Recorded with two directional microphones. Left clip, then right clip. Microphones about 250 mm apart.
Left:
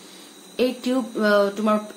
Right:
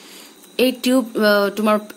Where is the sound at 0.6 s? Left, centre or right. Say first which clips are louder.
Right 5 dB; right.